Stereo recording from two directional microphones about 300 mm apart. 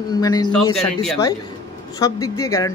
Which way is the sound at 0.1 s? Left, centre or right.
Centre.